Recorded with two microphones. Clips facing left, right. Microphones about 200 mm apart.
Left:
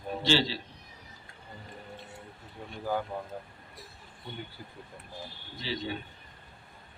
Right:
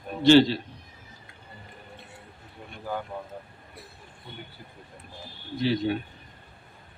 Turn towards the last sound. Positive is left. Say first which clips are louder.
# right 10 dB
turn(degrees=-60)  # may be behind; listen again after turning